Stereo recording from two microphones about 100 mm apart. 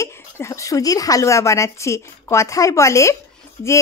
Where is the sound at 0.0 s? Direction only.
30° left (ahead or behind).